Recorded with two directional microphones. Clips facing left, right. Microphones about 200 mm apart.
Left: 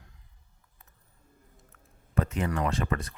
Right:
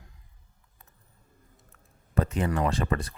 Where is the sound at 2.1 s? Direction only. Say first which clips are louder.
Right 2 dB; 35° right (ahead or behind).